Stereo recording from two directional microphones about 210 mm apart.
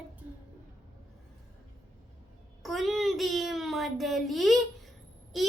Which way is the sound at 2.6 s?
Centre (ahead or behind).